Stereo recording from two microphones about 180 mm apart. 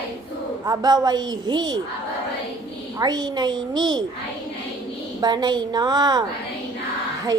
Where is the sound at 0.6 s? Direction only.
20° right (ahead or behind).